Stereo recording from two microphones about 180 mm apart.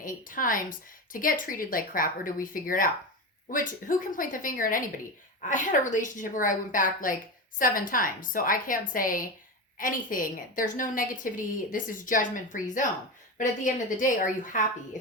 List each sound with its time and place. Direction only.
0.0 s a woman's voice: 50° left (ahead or behind)